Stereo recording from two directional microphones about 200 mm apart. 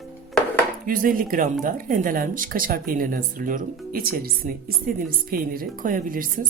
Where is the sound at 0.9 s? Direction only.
45° right (ahead or behind).